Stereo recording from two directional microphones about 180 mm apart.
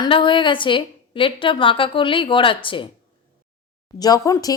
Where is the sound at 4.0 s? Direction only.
20° left (ahead or behind).